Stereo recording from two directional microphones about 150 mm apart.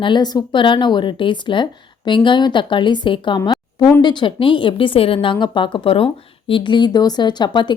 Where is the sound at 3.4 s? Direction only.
20° left (ahead or behind).